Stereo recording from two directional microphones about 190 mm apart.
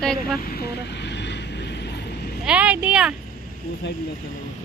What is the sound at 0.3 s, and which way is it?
Speech, 50° left (ahead or behind).